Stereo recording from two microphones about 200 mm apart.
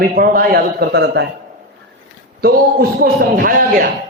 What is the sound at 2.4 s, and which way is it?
A man's voice, 50° right (ahead or behind).